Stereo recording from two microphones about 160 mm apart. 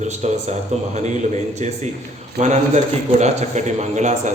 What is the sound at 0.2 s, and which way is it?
A man's voice, 45° right (ahead or behind).